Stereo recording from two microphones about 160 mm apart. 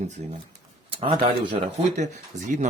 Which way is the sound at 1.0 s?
35° right (ahead or behind).